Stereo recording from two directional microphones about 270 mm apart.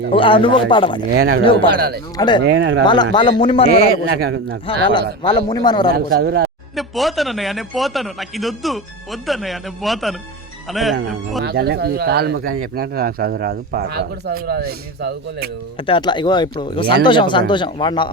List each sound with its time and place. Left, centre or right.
0.1 s speech: centre
1.1 s speech: right
2.1 s speech: centre
2.4 s speech: right
2.8 s speech: centre
4.2 s speech: right
4.6 s speech: centre
5.9 s speech: right
6.7 s a man's voice: centre
11.4 s speech: right
15.9 s speech: centre